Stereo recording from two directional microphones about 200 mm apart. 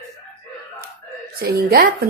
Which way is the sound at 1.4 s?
50° right (ahead or behind).